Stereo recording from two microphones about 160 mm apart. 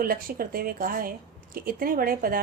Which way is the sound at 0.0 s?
65° right (ahead or behind).